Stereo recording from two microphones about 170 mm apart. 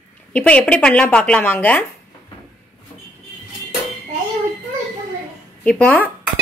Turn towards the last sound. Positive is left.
turn(degrees=10)  # may be behind; listen again after turning